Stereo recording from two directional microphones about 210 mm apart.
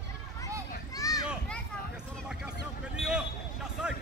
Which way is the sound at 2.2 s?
5° right (ahead or behind).